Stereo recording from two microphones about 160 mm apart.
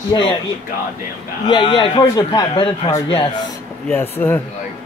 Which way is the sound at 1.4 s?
30° left (ahead or behind).